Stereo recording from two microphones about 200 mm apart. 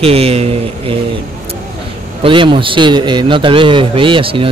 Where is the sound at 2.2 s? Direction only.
25° right (ahead or behind).